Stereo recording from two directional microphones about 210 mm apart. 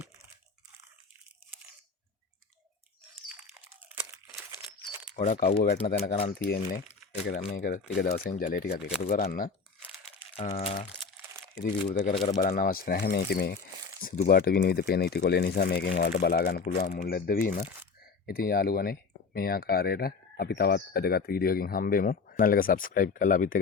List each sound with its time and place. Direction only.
5.3 s speech: 40° left (ahead or behind)
5.8 s speech: 45° left (ahead or behind)
10.3 s speech: 30° left (ahead or behind)
11.9 s speech: 40° left (ahead or behind)